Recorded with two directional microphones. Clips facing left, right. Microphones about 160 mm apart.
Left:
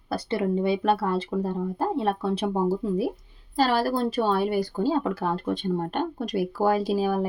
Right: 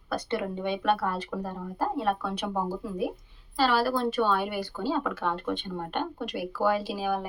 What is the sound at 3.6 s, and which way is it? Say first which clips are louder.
Speech: left 2 dB; 40° left (ahead or behind).